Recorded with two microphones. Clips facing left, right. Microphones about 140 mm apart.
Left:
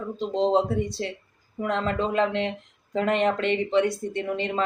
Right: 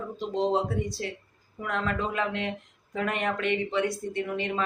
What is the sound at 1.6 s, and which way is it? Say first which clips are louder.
Speech: left 4 dB; 25° left (ahead or behind).